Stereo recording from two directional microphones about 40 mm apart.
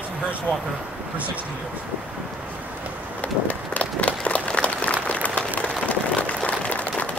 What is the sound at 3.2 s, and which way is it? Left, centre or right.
Applause, left.